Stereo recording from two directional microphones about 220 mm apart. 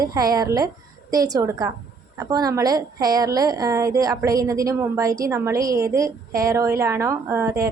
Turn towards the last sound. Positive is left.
turn(degrees=-15)  # may be behind; listen again after turning